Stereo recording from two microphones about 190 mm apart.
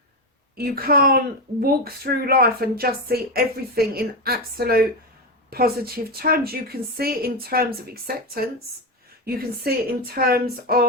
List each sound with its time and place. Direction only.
0.5 s speech: 55° right (ahead or behind)